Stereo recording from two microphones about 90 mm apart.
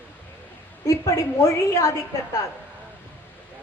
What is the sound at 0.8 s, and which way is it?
Speech, 35° left (ahead or behind).